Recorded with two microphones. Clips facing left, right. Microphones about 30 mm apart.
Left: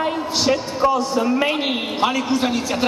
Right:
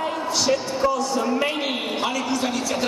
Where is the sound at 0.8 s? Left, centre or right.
Left.